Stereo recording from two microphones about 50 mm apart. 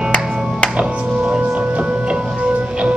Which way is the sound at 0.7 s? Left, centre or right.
Right.